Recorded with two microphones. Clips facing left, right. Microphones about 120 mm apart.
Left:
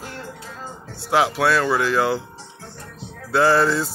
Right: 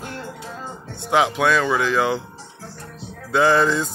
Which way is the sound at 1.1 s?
5° left (ahead or behind).